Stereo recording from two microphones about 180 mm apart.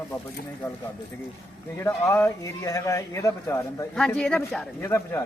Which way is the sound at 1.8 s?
15° left (ahead or behind).